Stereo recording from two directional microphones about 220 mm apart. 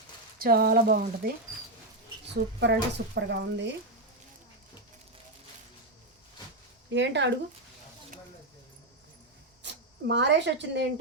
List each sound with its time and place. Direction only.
0.3 s speech: 45° right (ahead or behind)
2.7 s speech: 50° right (ahead or behind)
6.9 s speech: 55° right (ahead or behind)
9.6 s speech: 50° right (ahead or behind)